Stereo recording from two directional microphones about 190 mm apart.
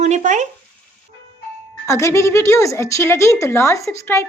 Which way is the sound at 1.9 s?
15° left (ahead or behind).